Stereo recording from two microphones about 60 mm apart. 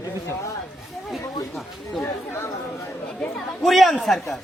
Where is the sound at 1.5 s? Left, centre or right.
Centre.